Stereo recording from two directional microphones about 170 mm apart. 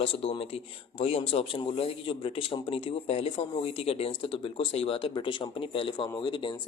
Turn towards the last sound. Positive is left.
turn(degrees=30)  # may be behind; listen again after turning